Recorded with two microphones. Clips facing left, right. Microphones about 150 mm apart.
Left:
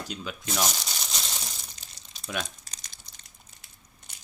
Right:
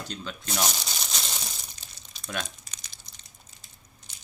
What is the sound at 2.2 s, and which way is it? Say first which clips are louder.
Speech: left 1 dB; 5° left (ahead or behind).